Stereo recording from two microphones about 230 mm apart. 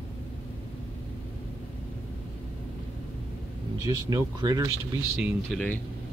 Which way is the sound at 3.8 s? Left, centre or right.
Centre.